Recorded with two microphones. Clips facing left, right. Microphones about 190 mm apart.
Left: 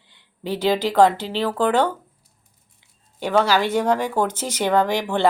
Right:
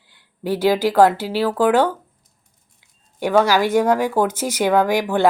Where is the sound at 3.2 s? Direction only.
10° right (ahead or behind).